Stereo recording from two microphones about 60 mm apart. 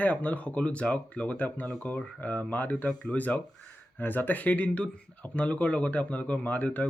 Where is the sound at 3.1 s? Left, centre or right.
Left.